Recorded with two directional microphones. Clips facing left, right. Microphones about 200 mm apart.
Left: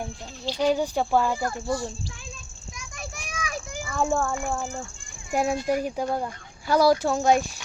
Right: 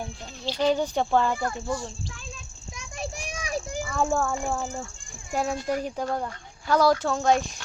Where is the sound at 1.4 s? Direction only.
35° left (ahead or behind).